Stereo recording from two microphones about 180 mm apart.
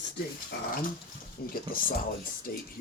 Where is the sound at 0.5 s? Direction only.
60° left (ahead or behind).